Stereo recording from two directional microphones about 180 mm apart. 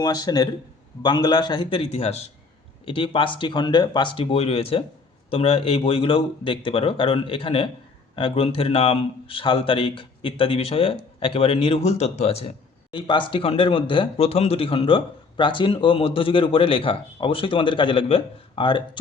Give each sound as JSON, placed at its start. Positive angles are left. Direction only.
{"t": 0.0, "sound": "speech", "side_deg": 20}
{"t": 12.9, "sound": "speech", "side_deg": 25}